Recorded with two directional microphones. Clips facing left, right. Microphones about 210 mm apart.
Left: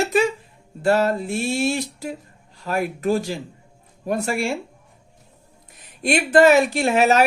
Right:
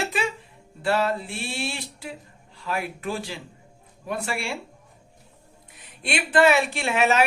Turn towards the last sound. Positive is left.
turn(degrees=40)  # may be behind; listen again after turning